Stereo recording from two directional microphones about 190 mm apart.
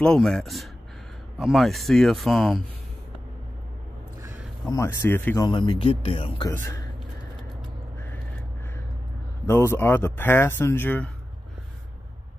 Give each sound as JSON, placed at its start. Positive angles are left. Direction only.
{"t": 0.0, "sound": "speech", "side_deg": 5}
{"t": 4.6, "sound": "speech", "side_deg": 15}
{"t": 5.5, "sound": "speech", "side_deg": 25}
{"t": 6.5, "sound": "speech", "side_deg": 15}
{"t": 9.5, "sound": "speech", "side_deg": 15}